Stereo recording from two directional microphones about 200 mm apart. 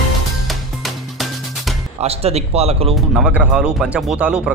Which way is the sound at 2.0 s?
30° right (ahead or behind).